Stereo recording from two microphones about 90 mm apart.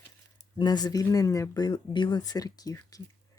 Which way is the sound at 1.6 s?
50° left (ahead or behind).